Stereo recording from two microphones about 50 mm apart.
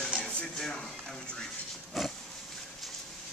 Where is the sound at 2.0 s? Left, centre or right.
Centre.